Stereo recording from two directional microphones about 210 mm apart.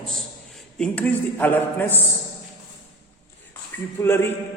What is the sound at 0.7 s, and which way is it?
A man's voice, 5° left (ahead or behind).